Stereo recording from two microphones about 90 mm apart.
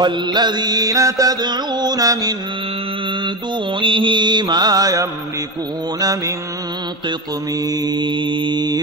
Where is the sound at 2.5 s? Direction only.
85° right; by 6.7 s 35° right (ahead or behind).